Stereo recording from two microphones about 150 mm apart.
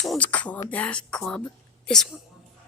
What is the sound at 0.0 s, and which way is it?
Speech, 5° left (ahead or behind).